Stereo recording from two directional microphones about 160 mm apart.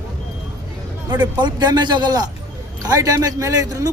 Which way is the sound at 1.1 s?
25° right (ahead or behind).